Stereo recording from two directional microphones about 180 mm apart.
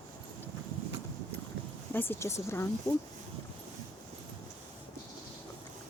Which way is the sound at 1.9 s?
15° left (ahead or behind).